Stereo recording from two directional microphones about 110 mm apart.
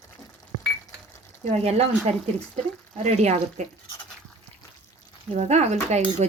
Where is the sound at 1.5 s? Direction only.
75° right (ahead or behind).